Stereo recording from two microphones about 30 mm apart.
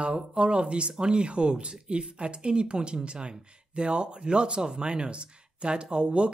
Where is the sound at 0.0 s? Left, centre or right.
Right.